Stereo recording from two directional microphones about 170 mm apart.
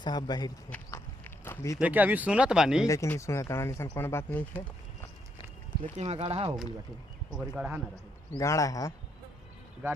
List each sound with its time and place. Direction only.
0.0 s speech: 25° left (ahead or behind)
0.7 s walk: 15° left (ahead or behind)
1.8 s speech: 10° right (ahead or behind)
2.8 s speech: 20° left (ahead or behind)
6.0 s speech: 35° right (ahead or behind)
7.3 s speech: 5° right (ahead or behind)
8.3 s speech: 20° left (ahead or behind)